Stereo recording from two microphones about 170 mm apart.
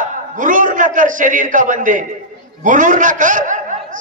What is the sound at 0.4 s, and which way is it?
A man's voice, 50° right (ahead or behind).